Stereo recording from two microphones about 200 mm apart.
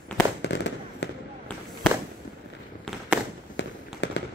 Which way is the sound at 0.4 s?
60° left (ahead or behind).